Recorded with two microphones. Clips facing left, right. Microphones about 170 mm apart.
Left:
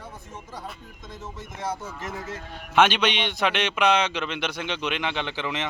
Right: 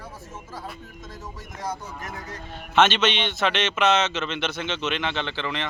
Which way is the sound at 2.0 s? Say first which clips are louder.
Left 3 dB; 25° left (ahead or behind).